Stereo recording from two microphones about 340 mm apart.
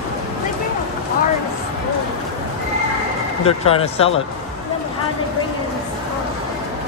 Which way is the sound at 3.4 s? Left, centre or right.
Centre.